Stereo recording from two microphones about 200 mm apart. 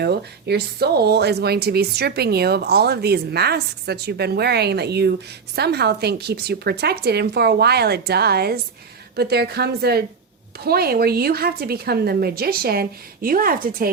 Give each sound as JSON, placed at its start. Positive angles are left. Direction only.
{"t": 0.0, "sound": "speech", "side_deg": -55}